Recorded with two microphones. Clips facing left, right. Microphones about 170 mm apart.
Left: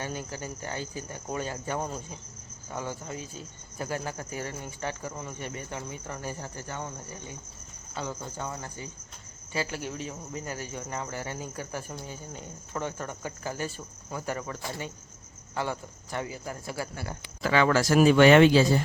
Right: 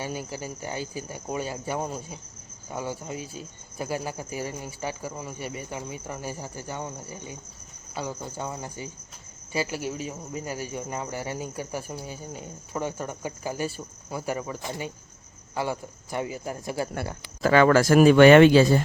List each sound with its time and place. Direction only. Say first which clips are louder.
0.0 s speech: right 2 dB; 10° right (ahead or behind)
17.2 s speech: right 6 dB; 45° right (ahead or behind)